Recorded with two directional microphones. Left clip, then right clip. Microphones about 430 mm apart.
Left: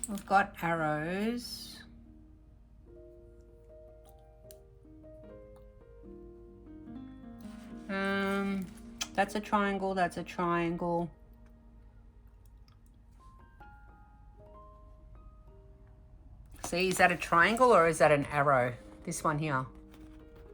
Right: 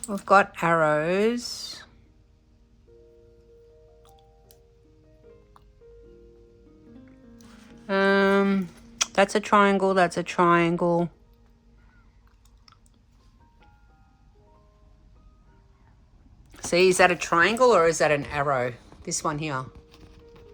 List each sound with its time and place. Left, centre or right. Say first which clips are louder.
0.3 s speech: right 9 dB; centre
7.9 s speech: right 12 dB; centre
16.5 s speech: right 11 dB; centre